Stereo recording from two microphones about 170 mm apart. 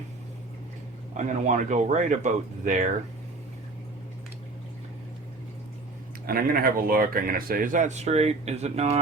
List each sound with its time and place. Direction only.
1.1 s speech: 45° right (ahead or behind)
6.2 s speech: 60° right (ahead or behind); by 9.0 s 40° right (ahead or behind)